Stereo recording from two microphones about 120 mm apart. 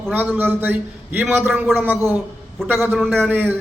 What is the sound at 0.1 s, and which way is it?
A man's voice, 15° right (ahead or behind).